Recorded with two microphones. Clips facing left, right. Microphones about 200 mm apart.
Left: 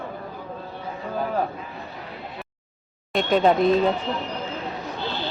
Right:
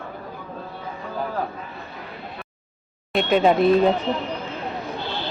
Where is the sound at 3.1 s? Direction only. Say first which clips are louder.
Right 1 dB; 5° right (ahead or behind).